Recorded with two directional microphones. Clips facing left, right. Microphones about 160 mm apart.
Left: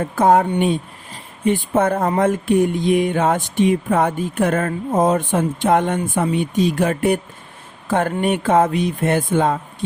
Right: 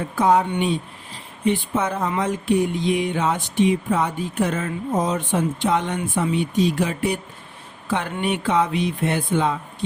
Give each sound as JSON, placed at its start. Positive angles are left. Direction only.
{"t": 0.0, "sound": "speech", "side_deg": 50}
{"t": 1.5, "sound": "speech", "side_deg": 50}